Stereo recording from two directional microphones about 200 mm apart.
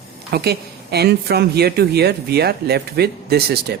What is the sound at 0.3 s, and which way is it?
Speech, 50° right (ahead or behind).